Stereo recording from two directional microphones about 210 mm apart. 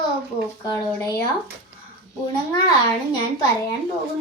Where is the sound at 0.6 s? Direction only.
15° left (ahead or behind).